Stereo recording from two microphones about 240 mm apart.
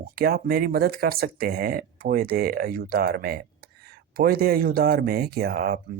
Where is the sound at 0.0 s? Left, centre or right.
Right.